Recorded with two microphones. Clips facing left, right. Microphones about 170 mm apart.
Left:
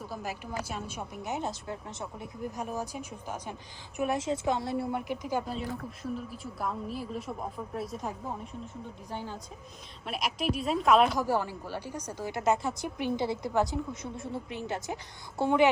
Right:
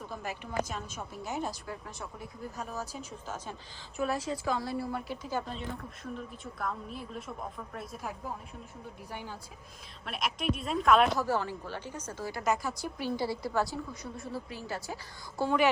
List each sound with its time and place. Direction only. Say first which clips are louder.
0.0 s a woman's voice: left 2 dB; 5° left (ahead or behind)
10.1 s speech: left 1 dB; centre (ahead or behind)
11.2 s a woman's voice: left 2 dB; 10° left (ahead or behind)